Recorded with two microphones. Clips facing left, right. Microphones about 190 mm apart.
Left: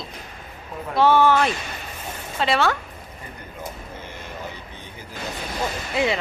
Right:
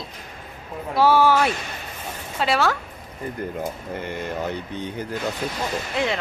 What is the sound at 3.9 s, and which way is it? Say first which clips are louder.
Speech: right 8 dB; 65° right (ahead or behind).